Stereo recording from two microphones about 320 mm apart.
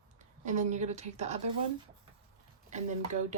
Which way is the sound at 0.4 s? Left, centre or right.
Right.